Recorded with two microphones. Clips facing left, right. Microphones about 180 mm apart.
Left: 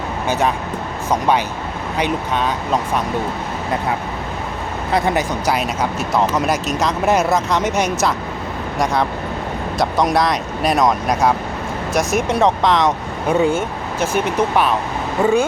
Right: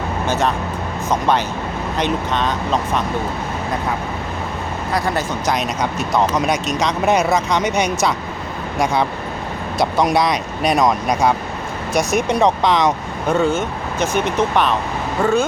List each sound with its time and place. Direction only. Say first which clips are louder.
0.3 s speech: left 1 dB; 15° left (ahead or behind)
2.0 s speech: even; 10° left (ahead or behind)
4.9 s speech: left 3 dB; 20° left (ahead or behind)
5.5 s speech: left 1 dB; 5° left (ahead or behind)
13.3 s speech: left 1 dB; 15° left (ahead or behind)